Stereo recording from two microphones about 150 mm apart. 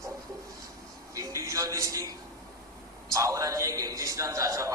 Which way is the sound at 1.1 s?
20° right (ahead or behind).